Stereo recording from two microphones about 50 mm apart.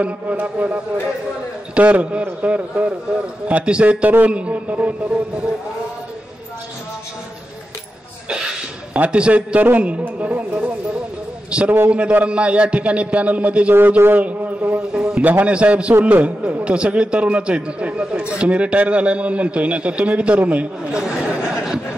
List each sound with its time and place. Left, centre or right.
0.0 s a man's voice: right
8.9 s a man's voice: right
13.7 s a man's voice: right
15.0 s a sound: centre
15.4 s a man's voice: right
16.6 s a man's voice: right